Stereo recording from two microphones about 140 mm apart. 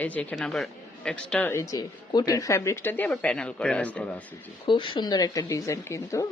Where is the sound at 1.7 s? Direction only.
25° left (ahead or behind); by 4.0 s 10° left (ahead or behind).